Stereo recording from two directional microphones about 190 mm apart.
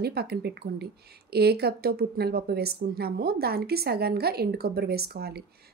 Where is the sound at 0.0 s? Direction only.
55° right (ahead or behind).